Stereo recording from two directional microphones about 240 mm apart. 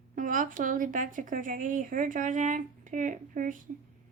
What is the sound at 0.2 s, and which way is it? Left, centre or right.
Speech, right.